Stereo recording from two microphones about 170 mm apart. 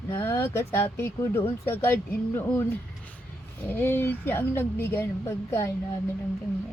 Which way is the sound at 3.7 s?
15° left (ahead or behind).